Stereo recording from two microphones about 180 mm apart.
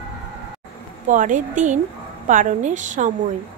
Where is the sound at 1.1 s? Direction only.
45° right (ahead or behind).